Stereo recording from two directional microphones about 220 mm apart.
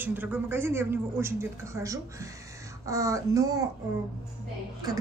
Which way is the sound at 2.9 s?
15° right (ahead or behind).